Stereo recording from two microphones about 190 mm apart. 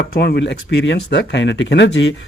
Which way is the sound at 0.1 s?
60° left (ahead or behind).